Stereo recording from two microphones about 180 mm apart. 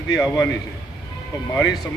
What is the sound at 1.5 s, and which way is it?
Speech, 20° left (ahead or behind).